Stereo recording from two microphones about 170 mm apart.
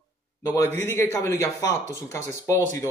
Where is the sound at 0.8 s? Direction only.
15° left (ahead or behind).